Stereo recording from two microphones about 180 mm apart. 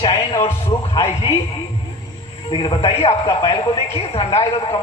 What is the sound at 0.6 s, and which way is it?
Speech, 20° left (ahead or behind).